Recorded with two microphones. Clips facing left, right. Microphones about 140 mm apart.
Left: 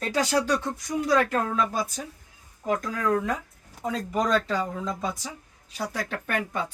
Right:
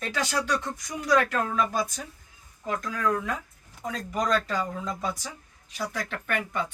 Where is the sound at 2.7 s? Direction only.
45° left (ahead or behind).